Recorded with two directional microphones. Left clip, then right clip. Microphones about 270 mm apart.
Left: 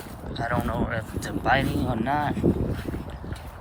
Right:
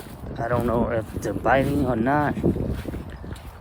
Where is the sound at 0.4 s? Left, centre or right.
Right.